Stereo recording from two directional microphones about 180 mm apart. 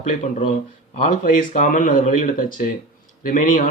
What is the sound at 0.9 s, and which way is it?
Speech, 45° left (ahead or behind).